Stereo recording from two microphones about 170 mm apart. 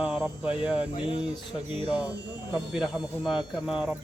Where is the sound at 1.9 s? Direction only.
25° left (ahead or behind).